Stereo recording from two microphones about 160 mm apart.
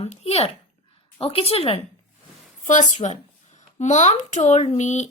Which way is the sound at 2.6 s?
50° left (ahead or behind).